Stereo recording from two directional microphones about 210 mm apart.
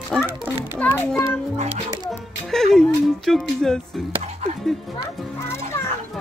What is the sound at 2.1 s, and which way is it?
Speech, centre (ahead or behind).